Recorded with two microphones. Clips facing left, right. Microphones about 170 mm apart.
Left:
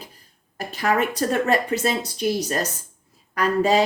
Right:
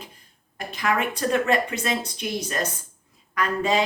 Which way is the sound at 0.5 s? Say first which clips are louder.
Left 3 dB; 40° left (ahead or behind).